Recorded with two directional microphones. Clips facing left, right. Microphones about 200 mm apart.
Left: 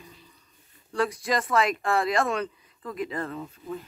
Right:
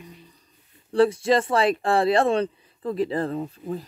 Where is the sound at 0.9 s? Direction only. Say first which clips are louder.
Right 8 dB; 30° right (ahead or behind).